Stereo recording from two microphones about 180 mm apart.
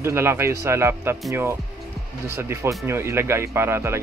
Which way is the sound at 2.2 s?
15° right (ahead or behind).